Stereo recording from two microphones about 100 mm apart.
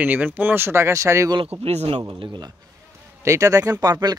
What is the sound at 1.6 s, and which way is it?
Speech, 80° right.